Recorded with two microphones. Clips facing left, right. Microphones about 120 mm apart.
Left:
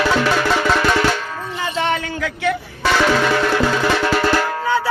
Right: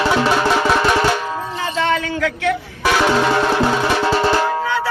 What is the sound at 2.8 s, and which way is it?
Music, 10° right (ahead or behind).